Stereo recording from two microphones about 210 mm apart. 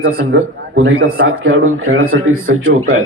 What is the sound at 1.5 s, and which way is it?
Speech, 75° right (ahead or behind).